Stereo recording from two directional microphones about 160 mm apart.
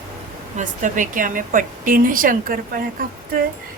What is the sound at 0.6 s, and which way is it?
A woman's voice, 55° right (ahead or behind).